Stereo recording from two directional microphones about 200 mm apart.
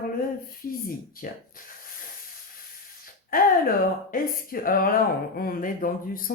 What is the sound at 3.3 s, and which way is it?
Speech, 45° left (ahead or behind).